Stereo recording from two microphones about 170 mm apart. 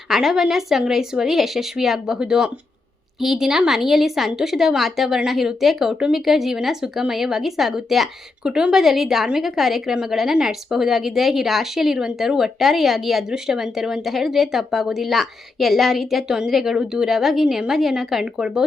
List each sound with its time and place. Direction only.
0.1 s a woman's voice: centre (ahead or behind)